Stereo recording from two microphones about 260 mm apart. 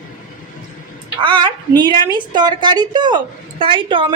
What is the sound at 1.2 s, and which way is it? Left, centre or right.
A woman's voice, centre.